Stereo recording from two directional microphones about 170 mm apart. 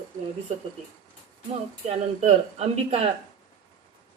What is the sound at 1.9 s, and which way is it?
Speech, 35° right (ahead or behind).